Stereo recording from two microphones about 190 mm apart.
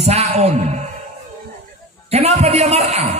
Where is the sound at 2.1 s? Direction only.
35° right (ahead or behind).